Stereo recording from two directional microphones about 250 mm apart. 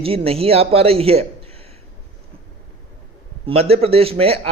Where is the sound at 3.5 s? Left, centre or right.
Right.